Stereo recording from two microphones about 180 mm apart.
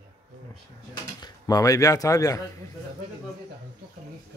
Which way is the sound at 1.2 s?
20° left (ahead or behind).